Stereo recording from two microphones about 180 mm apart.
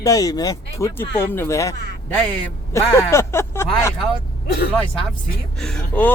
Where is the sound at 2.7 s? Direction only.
15° left (ahead or behind).